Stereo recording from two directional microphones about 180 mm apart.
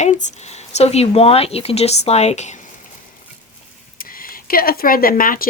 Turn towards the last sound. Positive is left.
turn(degrees=50)  # may be behind; listen again after turning